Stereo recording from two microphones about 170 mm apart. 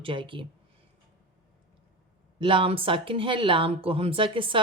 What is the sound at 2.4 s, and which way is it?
Speech, 30° right (ahead or behind).